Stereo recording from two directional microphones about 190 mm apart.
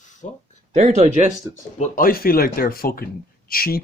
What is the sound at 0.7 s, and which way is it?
Speech, 35° right (ahead or behind).